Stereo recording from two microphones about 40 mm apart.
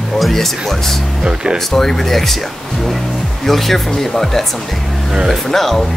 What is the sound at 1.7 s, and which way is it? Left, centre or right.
Speech, centre.